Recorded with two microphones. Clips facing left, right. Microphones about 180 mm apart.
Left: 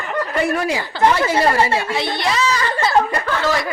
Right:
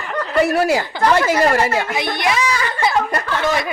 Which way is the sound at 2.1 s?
15° right (ahead or behind).